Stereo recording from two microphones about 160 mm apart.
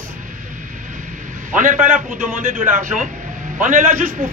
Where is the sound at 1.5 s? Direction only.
55° right (ahead or behind).